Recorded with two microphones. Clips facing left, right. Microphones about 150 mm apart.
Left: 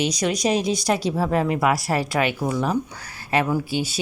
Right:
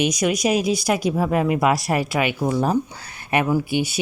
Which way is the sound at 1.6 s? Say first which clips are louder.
Right 2 dB; 20° right (ahead or behind).